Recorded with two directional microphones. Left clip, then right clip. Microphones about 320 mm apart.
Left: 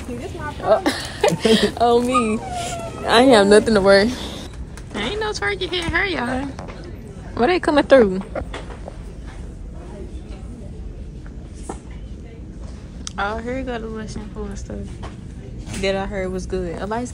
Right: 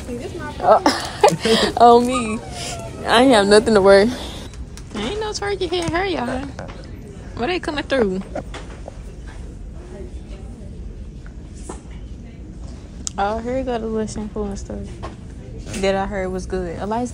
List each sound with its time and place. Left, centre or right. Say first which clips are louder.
0.7 s speech: right 4 dB; centre
2.0 s a woman's voice: left 3 dB; centre
13.0 s a woman's voice: right 3 dB; centre
15.9 s speech: right 2 dB; centre